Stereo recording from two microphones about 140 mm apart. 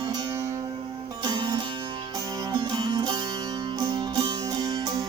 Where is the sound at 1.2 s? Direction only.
30° right (ahead or behind).